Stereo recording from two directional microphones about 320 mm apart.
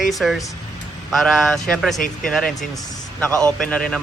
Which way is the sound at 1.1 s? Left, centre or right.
Centre.